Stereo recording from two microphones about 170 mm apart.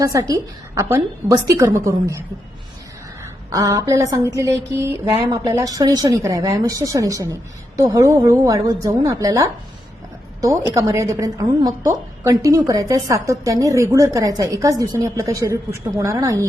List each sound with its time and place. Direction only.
0.0 s a woman's voice: 20° right (ahead or behind)
3.5 s a woman's voice: 20° right (ahead or behind)